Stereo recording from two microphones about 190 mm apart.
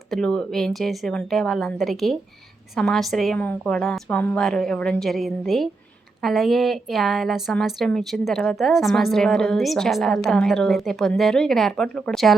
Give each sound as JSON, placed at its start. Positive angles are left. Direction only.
{"t": 0.1, "sound": "a woman's voice", "side_deg": 5}